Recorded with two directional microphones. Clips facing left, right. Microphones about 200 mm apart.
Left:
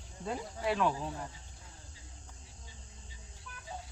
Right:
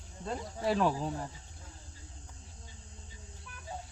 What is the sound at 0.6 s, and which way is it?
Speech, 35° right (ahead or behind).